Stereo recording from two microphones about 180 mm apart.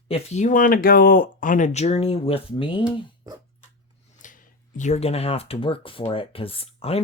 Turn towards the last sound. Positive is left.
turn(degrees=30)  # may be behind; listen again after turning